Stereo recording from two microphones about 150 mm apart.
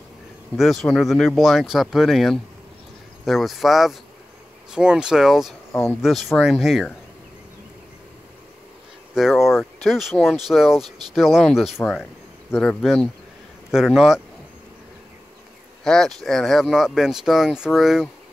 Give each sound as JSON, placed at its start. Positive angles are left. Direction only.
{"t": 0.6, "sound": "speech", "side_deg": 0}
{"t": 5.7, "sound": "speech", "side_deg": 15}
{"t": 6.0, "sound": "speech", "side_deg": 0}
{"t": 9.1, "sound": "speech", "side_deg": 0}
{"t": 15.8, "sound": "speech", "side_deg": 5}